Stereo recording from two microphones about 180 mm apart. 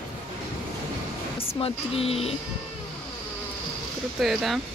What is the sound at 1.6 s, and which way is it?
Speech, 35° left (ahead or behind).